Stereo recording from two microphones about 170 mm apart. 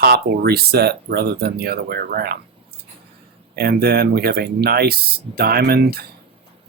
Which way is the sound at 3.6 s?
65° right (ahead or behind).